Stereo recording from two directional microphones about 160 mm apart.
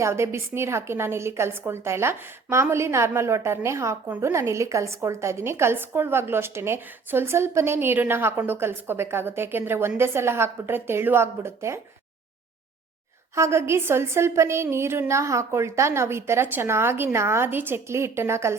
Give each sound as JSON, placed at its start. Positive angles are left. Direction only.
{"t": 0.0, "sound": "a woman's voice", "side_deg": -15}
{"t": 13.3, "sound": "a woman's voice", "side_deg": -15}